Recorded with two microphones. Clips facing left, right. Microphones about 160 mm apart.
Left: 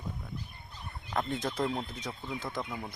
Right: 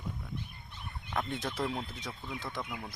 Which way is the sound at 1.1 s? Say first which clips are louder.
Left 3 dB; centre (ahead or behind).